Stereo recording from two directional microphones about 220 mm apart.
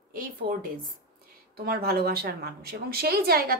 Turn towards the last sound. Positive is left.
turn(degrees=-45)  # may be behind; listen again after turning